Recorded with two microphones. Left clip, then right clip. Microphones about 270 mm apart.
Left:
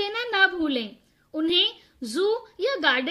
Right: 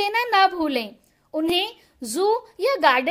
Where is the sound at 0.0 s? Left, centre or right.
Right.